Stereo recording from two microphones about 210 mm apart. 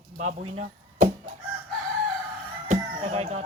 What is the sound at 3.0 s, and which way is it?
Speech, 30° right (ahead or behind).